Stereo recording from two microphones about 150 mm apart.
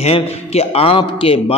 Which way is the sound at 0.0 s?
45° left (ahead or behind).